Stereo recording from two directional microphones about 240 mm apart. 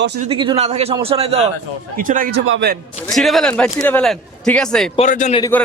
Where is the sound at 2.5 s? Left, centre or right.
Right.